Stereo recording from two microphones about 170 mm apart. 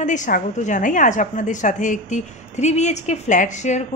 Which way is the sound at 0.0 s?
45° left (ahead or behind).